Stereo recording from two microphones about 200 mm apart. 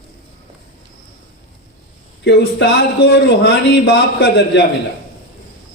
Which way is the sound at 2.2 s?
55° left (ahead or behind).